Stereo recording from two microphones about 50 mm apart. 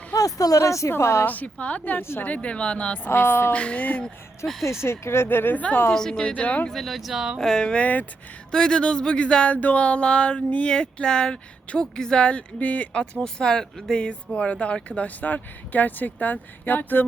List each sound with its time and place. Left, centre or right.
0.6 s a woman's voice: left
1.2 s speech: left
2.0 s speech: left
2.2 s speech: left
3.1 s speech: left
3.5 s speech: left
4.4 s speech: left
5.9 s speech: centre
6.2 s speech: left
6.7 s speech: centre
7.3 s speech: centre
7.8 s speech: left
8.5 s speech: centre
12.5 s speech: left